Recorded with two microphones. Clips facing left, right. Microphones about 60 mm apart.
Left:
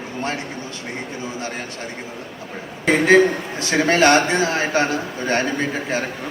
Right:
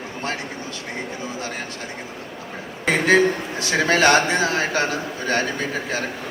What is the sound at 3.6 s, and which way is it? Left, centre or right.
A man's voice, left.